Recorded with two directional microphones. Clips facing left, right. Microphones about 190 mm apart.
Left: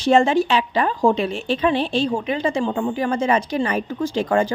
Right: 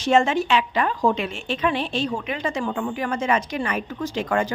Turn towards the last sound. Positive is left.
turn(degrees=30)  # may be behind; listen again after turning